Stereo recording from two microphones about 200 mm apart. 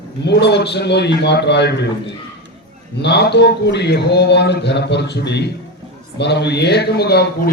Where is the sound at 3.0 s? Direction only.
55° left (ahead or behind).